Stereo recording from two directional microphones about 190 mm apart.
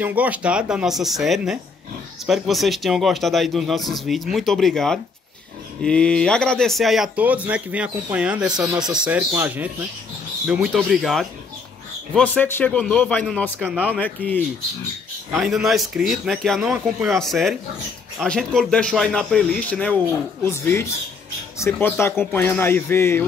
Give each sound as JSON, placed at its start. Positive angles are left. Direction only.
{"t": 0.0, "sound": "speech", "side_deg": -10}
{"t": 8.5, "sound": "speech", "side_deg": -20}
{"t": 8.9, "sound": "speech", "side_deg": -5}
{"t": 12.2, "sound": "a man's voice", "side_deg": 10}
{"t": 13.6, "sound": "speech", "side_deg": -5}
{"t": 13.8, "sound": "a man's voice", "side_deg": 10}
{"t": 15.3, "sound": "a man's voice", "side_deg": 0}